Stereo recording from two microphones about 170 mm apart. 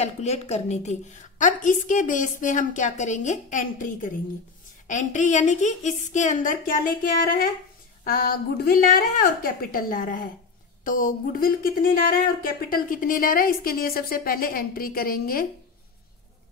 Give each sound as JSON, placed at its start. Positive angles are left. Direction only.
{"t": 0.0, "sound": "a woman's voice", "side_deg": 40}